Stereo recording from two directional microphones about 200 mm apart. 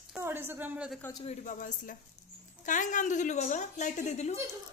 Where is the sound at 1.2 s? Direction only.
35° left (ahead or behind).